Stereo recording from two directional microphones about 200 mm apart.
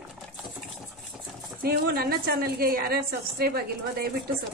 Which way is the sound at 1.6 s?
50° right (ahead or behind).